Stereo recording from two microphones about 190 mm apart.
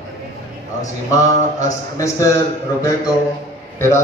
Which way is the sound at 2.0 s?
15° left (ahead or behind).